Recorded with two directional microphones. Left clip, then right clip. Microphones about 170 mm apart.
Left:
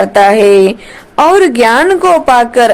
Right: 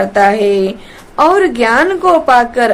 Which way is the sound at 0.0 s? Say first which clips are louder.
Left 4 dB; 35° left (ahead or behind).